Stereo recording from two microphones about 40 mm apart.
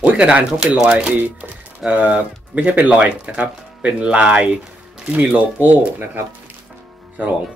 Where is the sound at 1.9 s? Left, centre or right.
Right.